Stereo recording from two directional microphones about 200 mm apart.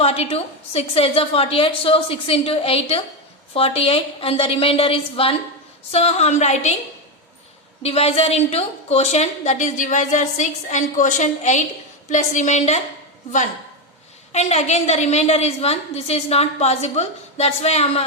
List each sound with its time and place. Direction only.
0.0 s a woman's voice: 30° left (ahead or behind)
7.8 s a woman's voice: 30° left (ahead or behind)
14.3 s a woman's voice: 35° left (ahead or behind)